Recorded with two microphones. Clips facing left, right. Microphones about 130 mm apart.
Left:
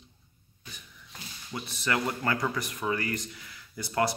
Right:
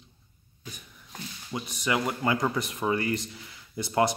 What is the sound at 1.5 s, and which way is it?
Speech, 15° right (ahead or behind).